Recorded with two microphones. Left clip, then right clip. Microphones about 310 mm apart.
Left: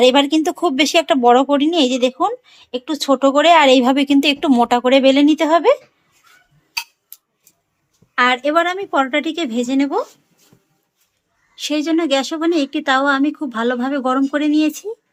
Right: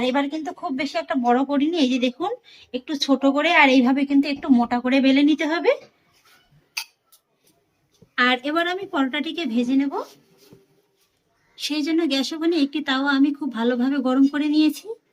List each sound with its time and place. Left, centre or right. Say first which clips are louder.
0.0 s speech: left 11 dB; left
8.1 s speech: left 6 dB; centre
11.5 s speech: left 5 dB; centre